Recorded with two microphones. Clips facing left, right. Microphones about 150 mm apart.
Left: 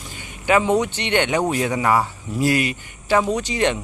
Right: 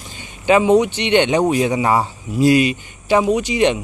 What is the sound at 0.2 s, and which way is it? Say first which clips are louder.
Speech: right 4 dB; 20° right (ahead or behind).